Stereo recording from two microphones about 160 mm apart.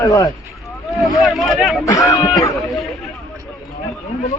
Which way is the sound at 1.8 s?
20° left (ahead or behind).